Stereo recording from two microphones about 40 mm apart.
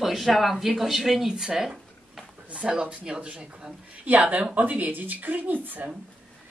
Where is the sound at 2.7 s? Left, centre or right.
Right.